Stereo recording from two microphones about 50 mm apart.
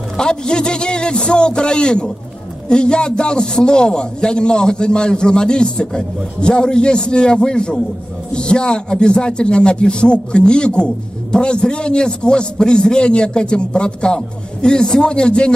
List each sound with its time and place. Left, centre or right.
0.2 s a man's voice: centre